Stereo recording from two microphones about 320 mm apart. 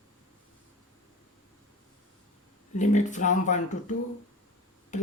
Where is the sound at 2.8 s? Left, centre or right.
Left.